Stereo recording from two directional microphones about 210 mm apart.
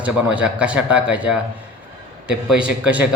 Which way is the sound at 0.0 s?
5° right (ahead or behind).